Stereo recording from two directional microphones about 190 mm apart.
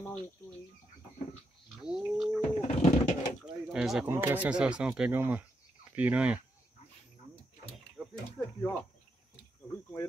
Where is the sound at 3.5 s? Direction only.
5° right (ahead or behind).